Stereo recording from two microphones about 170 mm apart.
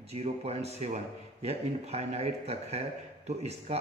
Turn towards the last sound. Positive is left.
turn(degrees=-40)  # may be behind; listen again after turning